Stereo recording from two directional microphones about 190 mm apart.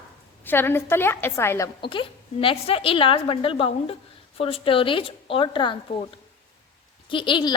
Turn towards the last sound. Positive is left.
turn(degrees=25)  # may be behind; listen again after turning